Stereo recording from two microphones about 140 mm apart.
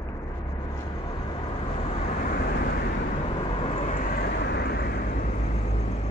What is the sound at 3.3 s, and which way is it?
Vehicle, 45° left (ahead or behind).